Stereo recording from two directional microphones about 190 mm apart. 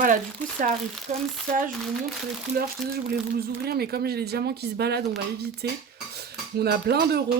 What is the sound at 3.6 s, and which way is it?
Speech, 55° right (ahead or behind).